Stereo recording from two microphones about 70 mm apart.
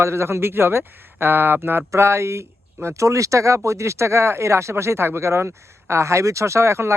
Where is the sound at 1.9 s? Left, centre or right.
Right.